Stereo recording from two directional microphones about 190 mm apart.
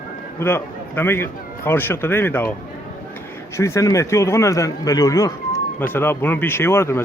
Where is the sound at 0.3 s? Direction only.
10° left (ahead or behind).